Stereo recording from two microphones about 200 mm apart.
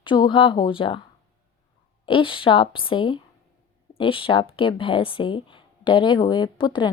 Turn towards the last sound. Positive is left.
turn(degrees=25)  # may be behind; listen again after turning